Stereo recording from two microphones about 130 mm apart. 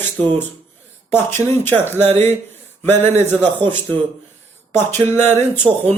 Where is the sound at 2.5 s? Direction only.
15° left (ahead or behind).